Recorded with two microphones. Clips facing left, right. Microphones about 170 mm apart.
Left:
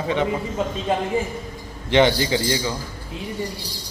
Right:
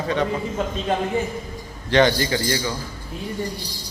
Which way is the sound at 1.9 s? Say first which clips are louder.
Left 1 dB; 20° left (ahead or behind).